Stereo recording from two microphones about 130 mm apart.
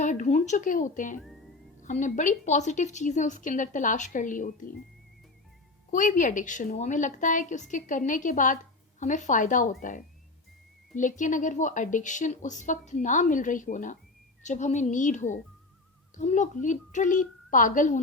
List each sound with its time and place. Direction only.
0.0 s a woman's voice: 70° left (ahead or behind); by 1.2 s 85° left
1.8 s a woman's voice: 75° left (ahead or behind); by 4.7 s 90° left
5.9 s a woman's voice: 80° left
9.0 s a woman's voice: 70° left (ahead or behind)
10.9 s a woman's voice: 80° left
14.4 s a woman's voice: 65° left (ahead or behind)